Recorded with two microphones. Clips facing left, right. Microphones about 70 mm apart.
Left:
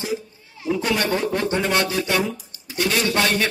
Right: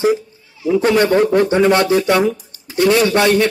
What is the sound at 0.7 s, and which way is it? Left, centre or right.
Speech, right.